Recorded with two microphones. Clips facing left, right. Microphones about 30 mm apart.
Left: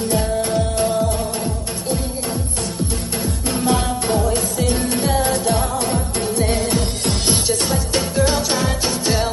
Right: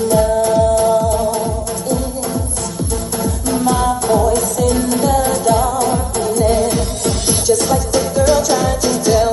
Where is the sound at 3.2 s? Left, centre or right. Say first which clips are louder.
Right 5 dB; centre.